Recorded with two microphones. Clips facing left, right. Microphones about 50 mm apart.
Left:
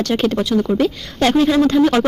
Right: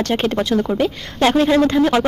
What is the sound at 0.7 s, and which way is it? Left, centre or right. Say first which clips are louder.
Speech: left 2 dB; centre.